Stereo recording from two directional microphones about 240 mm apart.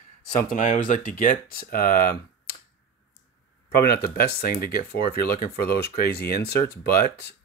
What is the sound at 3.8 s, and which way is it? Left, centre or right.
Speech, left.